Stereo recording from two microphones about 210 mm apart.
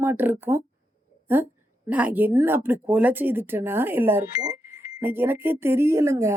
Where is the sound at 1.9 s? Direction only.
5° right (ahead or behind).